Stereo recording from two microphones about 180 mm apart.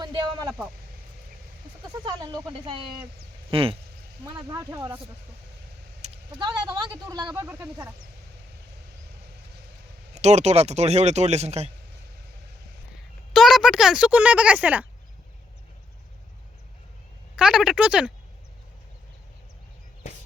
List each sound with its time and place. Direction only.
0.0 s a sound: 25° right (ahead or behind)
2.0 s speech: 25° right (ahead or behind)
4.5 s speech: 15° right (ahead or behind)
6.0 s vehicle: 40° right (ahead or behind)
6.4 s speech: 25° right (ahead or behind)
10.2 s speech: 40° right (ahead or behind)
13.3 s speech: centre (ahead or behind)
17.3 s speech: 5° right (ahead or behind)